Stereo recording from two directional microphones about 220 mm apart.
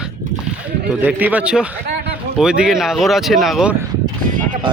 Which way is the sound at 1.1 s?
5° right (ahead or behind).